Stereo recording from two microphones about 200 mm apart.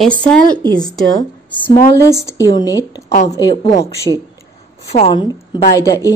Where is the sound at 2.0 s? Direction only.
15° left (ahead or behind).